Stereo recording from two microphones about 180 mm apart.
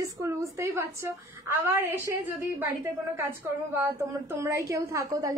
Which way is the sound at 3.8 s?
15° right (ahead or behind).